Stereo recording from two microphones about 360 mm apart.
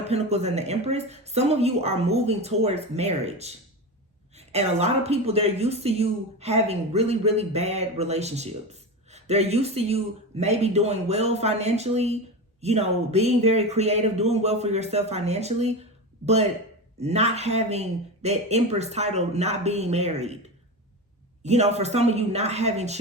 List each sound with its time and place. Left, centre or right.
0.1 s a woman's voice: centre
21.4 s a woman's voice: centre